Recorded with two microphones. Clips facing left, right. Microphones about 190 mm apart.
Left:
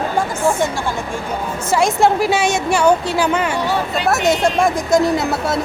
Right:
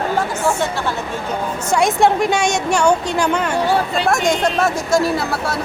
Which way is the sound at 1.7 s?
Centre (ahead or behind).